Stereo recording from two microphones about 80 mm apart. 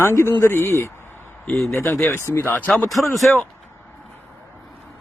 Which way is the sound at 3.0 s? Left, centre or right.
Centre.